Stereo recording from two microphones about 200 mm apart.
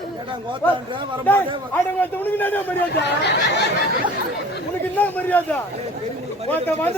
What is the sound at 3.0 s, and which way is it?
Speech, 60° left (ahead or behind).